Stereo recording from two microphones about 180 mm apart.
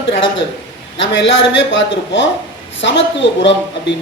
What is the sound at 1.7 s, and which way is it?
A woman's voice, 90° left.